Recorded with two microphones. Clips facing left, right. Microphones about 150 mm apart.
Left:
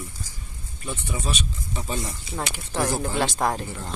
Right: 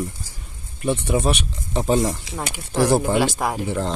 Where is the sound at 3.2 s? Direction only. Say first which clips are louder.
Right 2 dB; 5° right (ahead or behind).